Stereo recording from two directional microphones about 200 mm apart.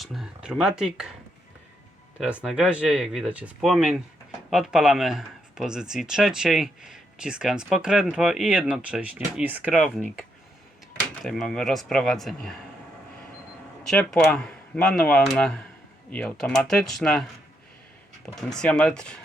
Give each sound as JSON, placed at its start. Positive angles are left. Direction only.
{"t": 0.0, "sound": "speech", "side_deg": 0}
{"t": 2.1, "sound": "speech", "side_deg": -5}
{"t": 13.8, "sound": "speech", "side_deg": 5}
{"t": 18.3, "sound": "speech", "side_deg": 0}